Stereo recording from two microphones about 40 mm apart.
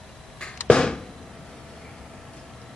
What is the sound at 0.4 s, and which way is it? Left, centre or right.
Arrow, left.